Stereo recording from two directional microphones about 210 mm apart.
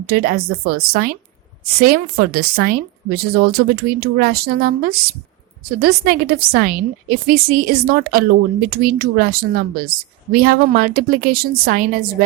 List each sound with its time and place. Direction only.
0.0 s a woman's voice: 45° right (ahead or behind)